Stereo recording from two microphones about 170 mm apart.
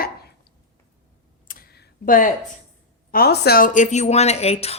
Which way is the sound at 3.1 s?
65° left (ahead or behind).